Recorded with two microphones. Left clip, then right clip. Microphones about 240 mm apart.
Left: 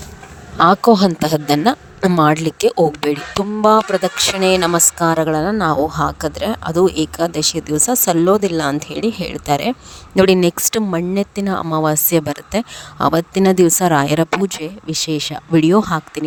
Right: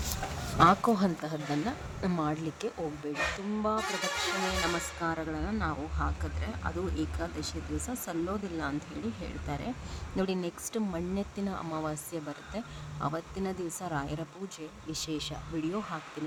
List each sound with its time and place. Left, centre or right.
0.6 s a woman's voice: left